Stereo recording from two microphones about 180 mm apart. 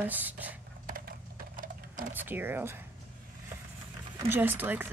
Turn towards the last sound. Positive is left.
turn(degrees=-10)  # may be behind; listen again after turning